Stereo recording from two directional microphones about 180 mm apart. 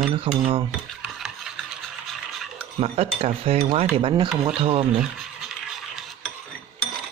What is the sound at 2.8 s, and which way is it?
Speech, 35° right (ahead or behind).